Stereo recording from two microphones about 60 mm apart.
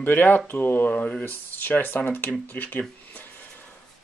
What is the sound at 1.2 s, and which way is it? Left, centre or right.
Speech, left.